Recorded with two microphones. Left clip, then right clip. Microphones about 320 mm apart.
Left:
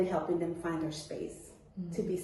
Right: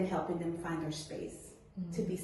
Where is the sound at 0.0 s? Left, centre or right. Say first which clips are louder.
Left 4 dB; centre.